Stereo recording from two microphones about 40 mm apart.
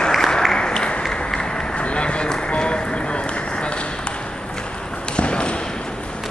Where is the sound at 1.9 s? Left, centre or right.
Left.